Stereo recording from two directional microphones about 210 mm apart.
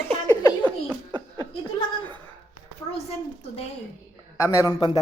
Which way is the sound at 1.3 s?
15° left (ahead or behind).